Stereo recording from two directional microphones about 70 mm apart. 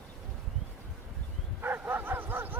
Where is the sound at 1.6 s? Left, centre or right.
Right.